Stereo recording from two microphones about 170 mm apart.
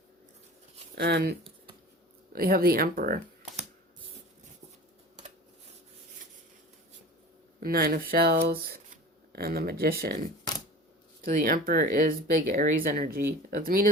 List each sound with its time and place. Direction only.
0.9 s speech: 70° right (ahead or behind)
7.6 s speech: 60° right (ahead or behind)
11.2 s speech: 55° right (ahead or behind)